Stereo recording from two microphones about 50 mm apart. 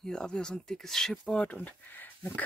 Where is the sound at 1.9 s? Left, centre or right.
Left.